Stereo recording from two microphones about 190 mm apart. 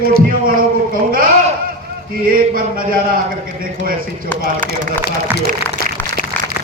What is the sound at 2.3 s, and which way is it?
Speech, 50° right (ahead or behind).